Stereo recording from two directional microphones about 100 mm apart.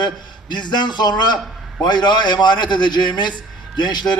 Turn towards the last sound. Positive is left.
turn(degrees=45)  # may be behind; listen again after turning